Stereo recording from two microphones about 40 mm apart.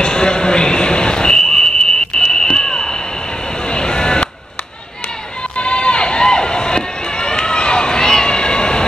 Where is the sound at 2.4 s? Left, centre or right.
Centre.